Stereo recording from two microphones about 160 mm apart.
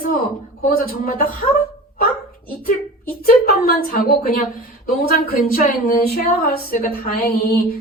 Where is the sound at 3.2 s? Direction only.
65° left (ahead or behind).